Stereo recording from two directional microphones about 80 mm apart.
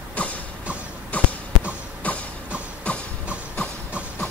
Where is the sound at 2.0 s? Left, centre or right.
Centre.